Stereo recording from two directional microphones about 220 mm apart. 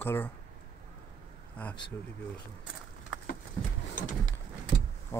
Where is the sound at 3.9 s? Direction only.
35° left (ahead or behind).